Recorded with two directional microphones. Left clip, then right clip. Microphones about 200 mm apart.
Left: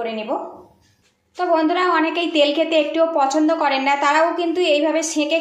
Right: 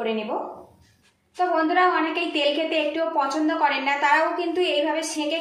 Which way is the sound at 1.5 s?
40° left (ahead or behind).